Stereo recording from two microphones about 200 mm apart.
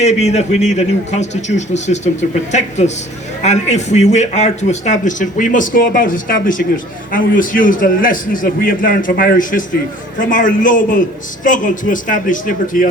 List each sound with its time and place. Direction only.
0.0 s a man's voice: 35° left (ahead or behind)